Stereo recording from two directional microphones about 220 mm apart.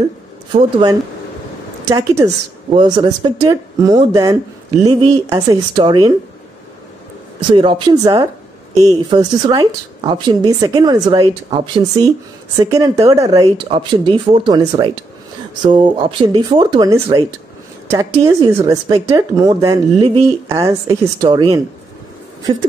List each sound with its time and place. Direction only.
0.5 s a woman's voice: 20° right (ahead or behind)
7.5 s a woman's voice: 20° right (ahead or behind)